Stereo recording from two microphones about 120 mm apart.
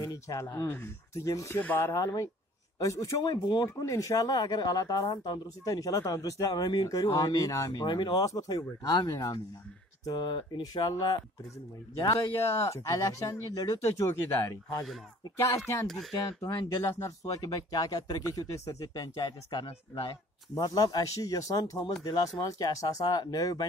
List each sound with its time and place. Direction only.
0.0 s speech: 30° left (ahead or behind)
3.8 s speech: 25° left (ahead or behind)
12.0 s speech: 25° left (ahead or behind)
16.9 s speech: 25° left (ahead or behind)
19.6 s speech: 45° left (ahead or behind)
20.5 s speech: 30° left (ahead or behind)